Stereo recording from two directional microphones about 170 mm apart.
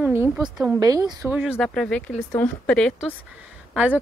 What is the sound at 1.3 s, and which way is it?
Speech, 5° right (ahead or behind).